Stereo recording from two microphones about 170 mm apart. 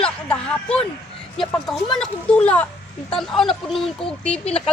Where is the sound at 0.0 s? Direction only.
5° left (ahead or behind).